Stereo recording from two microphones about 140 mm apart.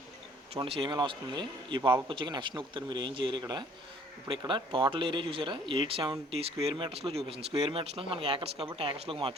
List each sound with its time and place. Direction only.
0.5 s a man's voice: 40° right (ahead or behind)